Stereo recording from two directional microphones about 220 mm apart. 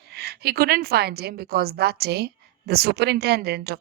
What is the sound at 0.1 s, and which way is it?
A woman's voice, 45° right (ahead or behind).